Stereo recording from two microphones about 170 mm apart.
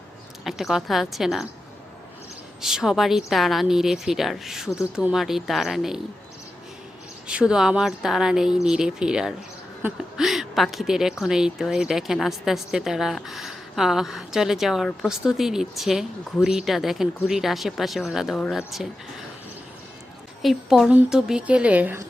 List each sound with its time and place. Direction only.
0.4 s a woman's voice: centre (ahead or behind)
2.6 s a woman's voice: 5° right (ahead or behind)
7.3 s a woman's voice: 5° right (ahead or behind)
20.4 s a woman's voice: centre (ahead or behind)